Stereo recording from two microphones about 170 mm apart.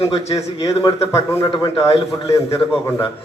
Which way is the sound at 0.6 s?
20° left (ahead or behind).